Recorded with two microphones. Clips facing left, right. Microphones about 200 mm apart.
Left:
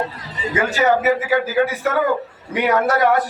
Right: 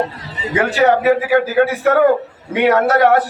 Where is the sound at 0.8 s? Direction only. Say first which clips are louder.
Right 4 dB; 65° right (ahead or behind).